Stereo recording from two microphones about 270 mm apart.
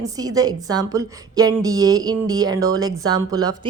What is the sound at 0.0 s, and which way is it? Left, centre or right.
A woman's voice, centre.